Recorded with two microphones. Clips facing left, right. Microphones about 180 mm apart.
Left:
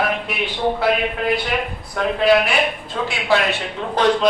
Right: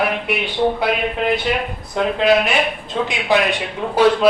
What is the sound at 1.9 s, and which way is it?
A man's voice, 20° right (ahead or behind).